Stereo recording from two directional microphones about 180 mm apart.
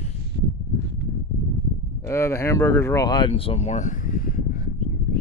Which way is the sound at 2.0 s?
15° left (ahead or behind).